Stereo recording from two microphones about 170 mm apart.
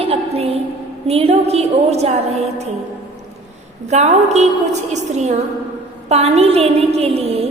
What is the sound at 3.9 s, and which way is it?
Music, 40° right (ahead or behind).